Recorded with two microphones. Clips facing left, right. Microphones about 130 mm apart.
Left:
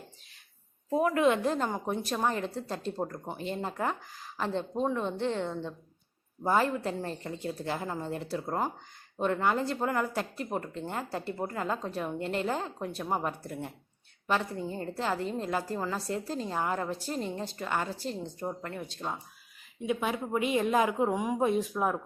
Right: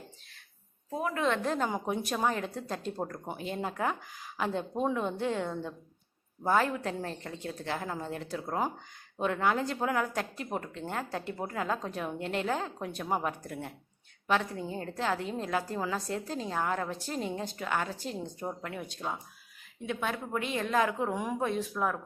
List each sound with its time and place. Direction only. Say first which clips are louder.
0.9 s a woman's voice: left 5 dB; 10° left (ahead or behind)
1.5 s a woman's voice: left 1 dB; centre (ahead or behind); by 21.9 s 15° left (ahead or behind)